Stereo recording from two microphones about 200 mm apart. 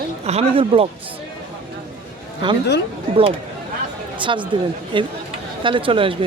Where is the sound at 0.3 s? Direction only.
30° right (ahead or behind).